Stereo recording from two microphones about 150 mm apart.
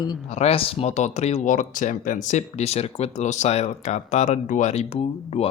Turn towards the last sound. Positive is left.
turn(degrees=40)  # may be behind; listen again after turning